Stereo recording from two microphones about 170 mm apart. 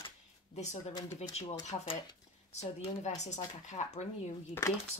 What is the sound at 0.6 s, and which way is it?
A woman's voice, 40° left (ahead or behind).